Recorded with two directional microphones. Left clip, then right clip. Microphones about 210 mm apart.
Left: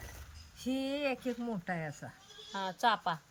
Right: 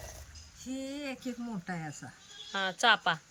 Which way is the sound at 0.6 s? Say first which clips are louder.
Left 5 dB; 25° left (ahead or behind).